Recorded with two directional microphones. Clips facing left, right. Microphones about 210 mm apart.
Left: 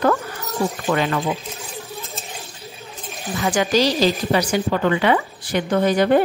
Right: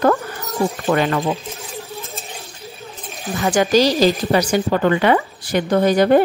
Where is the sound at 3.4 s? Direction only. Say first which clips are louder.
Right 3 dB; 45° right (ahead or behind).